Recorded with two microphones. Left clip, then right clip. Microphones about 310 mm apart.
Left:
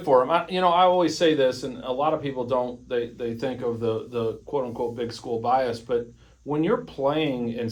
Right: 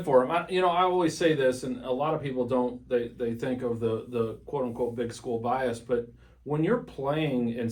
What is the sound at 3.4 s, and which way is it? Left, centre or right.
Speech, centre.